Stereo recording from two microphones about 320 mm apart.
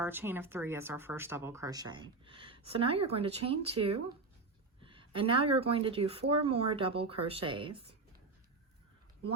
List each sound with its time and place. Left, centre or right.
0.0 s speech: centre